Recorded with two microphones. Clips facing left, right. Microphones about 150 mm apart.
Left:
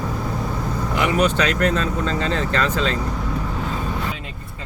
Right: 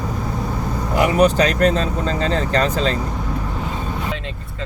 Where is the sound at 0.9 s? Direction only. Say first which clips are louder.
Right 5 dB; 40° right (ahead or behind).